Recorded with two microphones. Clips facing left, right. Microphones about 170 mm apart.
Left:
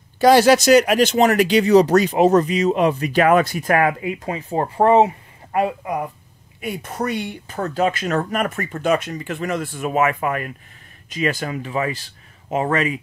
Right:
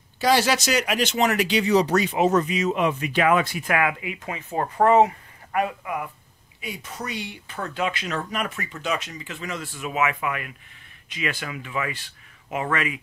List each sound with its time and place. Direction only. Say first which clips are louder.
0.2 s speech: left 8 dB; 50° left (ahead or behind)
6.6 s speech: left 9 dB; 55° left (ahead or behind); by 13.0 s 35° left (ahead or behind)